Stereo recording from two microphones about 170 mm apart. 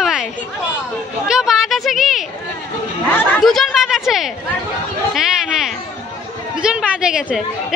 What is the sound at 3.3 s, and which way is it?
Speech, centre (ahead or behind).